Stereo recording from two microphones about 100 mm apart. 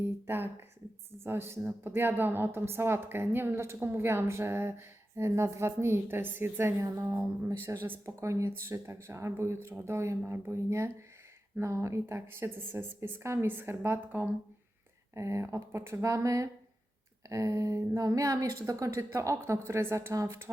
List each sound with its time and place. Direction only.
0.0 s a woman's voice: 20° right (ahead or behind)